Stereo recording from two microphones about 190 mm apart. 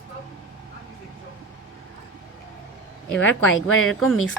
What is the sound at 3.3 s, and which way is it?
Speech, 90° left.